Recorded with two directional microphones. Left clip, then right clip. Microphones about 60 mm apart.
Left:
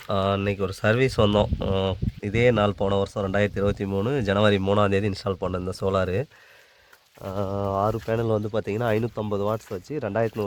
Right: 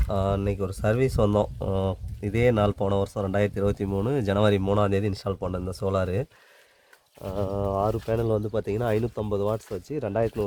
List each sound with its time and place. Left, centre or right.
0.1 s speech: centre
4.7 s speech: centre
5.3 s speech: centre
5.7 s speech: centre
7.2 s speech: centre
7.9 s speech: left
8.1 s speech: centre
8.8 s speech: left
9.2 s speech: centre